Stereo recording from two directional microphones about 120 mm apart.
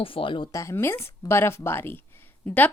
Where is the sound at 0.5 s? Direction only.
25° left (ahead or behind).